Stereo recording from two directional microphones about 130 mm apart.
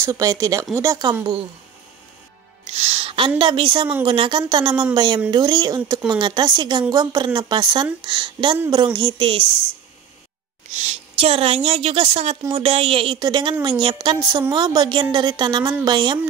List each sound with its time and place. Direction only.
0.0 s a woman's voice: 25° right (ahead or behind)
2.6 s a woman's voice: 55° right (ahead or behind)
10.8 s a woman's voice: 50° right (ahead or behind); by 16.2 s 35° right (ahead or behind)